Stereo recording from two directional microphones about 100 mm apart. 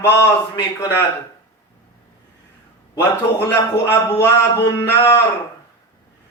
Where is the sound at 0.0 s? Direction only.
30° left (ahead or behind).